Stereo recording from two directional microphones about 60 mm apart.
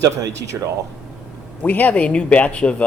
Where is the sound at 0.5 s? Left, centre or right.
Right.